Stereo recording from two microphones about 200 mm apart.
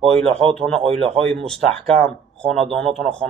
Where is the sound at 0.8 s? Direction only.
30° right (ahead or behind).